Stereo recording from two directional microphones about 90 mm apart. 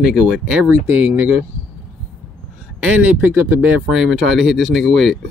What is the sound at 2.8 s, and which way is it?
Speech, 10° right (ahead or behind).